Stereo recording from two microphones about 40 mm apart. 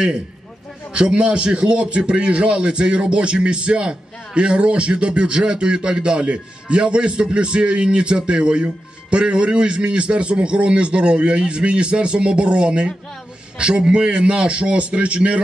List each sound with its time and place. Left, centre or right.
0.9 s a man's voice: right